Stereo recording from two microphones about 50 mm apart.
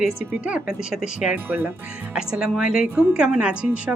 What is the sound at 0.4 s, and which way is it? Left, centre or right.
A woman's voice, centre.